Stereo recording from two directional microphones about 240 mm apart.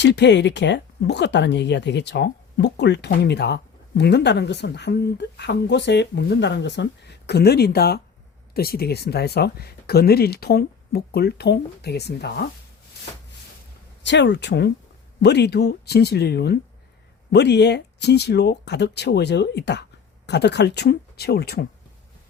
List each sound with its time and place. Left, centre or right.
0.0 s speech: left
14.0 s speech: left